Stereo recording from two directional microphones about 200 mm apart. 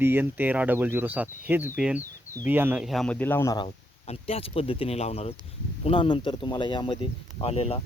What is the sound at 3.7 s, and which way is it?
Speech, 30° left (ahead or behind).